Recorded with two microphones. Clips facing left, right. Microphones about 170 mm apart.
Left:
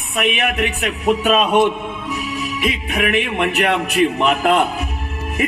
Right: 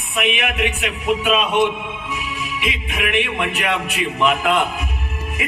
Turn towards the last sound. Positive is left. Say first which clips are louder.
# left 6 dB
turn(degrees=40)  # may be behind; listen again after turning